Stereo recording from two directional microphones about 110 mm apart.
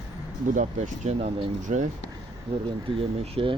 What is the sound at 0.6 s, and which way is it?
Speech, 90° right.